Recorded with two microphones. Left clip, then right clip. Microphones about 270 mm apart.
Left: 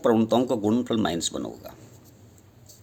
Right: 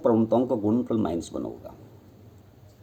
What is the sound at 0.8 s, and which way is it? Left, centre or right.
Speech, left.